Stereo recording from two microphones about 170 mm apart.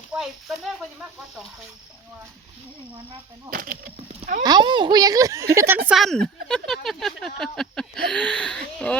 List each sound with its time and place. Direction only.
0.1 s speech: centre (ahead or behind)
3.5 s speech: 55° right (ahead or behind)
3.9 s speech: 35° right (ahead or behind); by 9.0 s 5° left (ahead or behind)